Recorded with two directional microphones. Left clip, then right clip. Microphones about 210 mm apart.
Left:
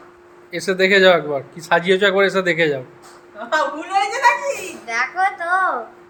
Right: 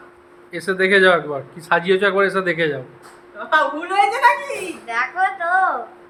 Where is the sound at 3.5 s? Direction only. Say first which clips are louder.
Right 2 dB; 15° right (ahead or behind).